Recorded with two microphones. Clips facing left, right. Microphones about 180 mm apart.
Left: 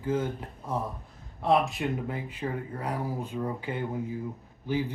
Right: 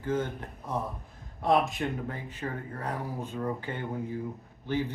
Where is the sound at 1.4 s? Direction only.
Centre (ahead or behind).